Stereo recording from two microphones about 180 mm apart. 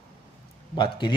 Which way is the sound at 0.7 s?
25° left (ahead or behind).